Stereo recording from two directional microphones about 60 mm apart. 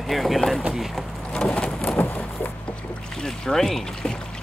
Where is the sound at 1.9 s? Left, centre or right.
Left.